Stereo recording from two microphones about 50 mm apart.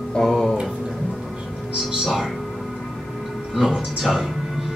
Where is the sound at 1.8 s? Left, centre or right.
Centre.